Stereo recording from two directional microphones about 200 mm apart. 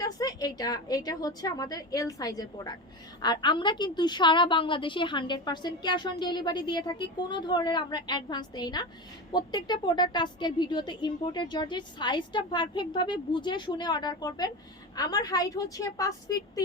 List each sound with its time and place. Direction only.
0.0 s a woman's voice: 20° left (ahead or behind)